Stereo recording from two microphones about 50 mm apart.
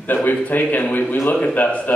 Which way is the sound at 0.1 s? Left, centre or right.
Left.